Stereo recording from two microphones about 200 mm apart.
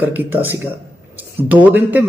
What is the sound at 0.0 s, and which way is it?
A man's voice, 10° right (ahead or behind).